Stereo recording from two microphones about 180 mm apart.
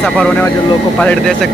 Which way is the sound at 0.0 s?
5° left (ahead or behind).